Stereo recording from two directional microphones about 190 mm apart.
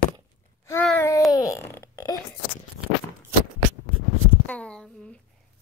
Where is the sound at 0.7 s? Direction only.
10° left (ahead or behind).